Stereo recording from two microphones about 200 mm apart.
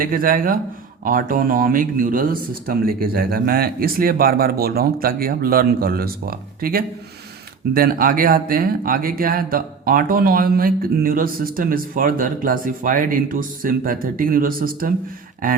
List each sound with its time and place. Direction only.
0.0 s speech: 45° right (ahead or behind)